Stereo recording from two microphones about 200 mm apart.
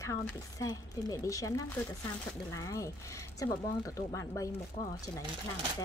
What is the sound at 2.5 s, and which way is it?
Speech, 15° left (ahead or behind).